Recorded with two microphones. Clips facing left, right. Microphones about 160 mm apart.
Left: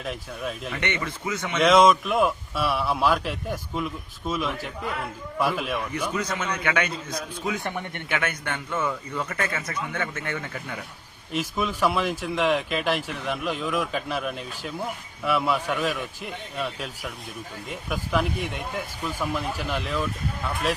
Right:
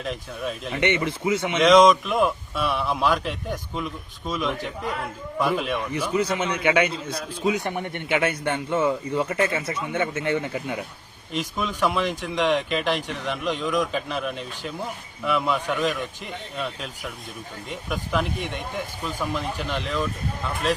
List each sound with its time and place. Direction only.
0.0 s speech: centre (ahead or behind)
0.7 s a man's voice: 25° right (ahead or behind)
1.4 s speech: 10° right (ahead or behind)
1.6 s speech: 5° left (ahead or behind)
6.1 s a man's voice: 25° right (ahead or behind)
8.1 s a man's voice: 30° right (ahead or behind)
11.3 s speech: 5° left (ahead or behind)